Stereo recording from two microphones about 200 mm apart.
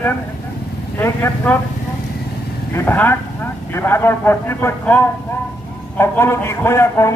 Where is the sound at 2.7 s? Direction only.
10° left (ahead or behind).